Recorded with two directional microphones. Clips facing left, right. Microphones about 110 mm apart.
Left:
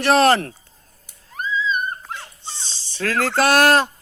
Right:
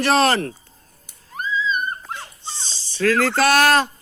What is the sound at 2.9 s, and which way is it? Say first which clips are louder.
Speech: right 3 dB; 55° left (ahead or behind).